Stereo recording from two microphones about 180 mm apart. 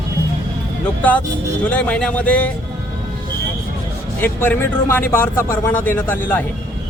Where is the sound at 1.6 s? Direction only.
5° left (ahead or behind).